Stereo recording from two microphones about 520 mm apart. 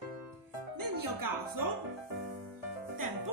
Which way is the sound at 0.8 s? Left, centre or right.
Right.